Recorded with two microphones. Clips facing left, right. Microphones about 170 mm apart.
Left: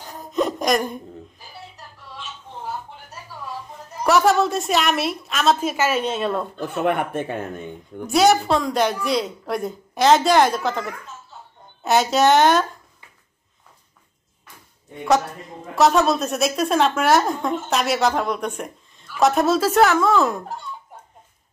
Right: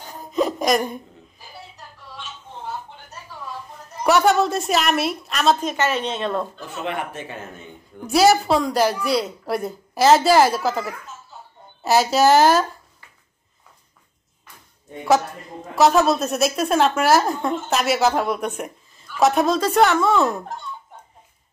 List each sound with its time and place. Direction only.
0.0 s a sound: centre (ahead or behind)
4.0 s a woman's voice: centre (ahead or behind)
6.6 s speech: 55° left (ahead or behind)
8.1 s a woman's voice: centre (ahead or behind)
15.7 s a woman's voice: centre (ahead or behind)